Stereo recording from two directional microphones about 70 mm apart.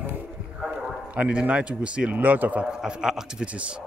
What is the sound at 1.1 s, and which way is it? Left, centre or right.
Speech, centre.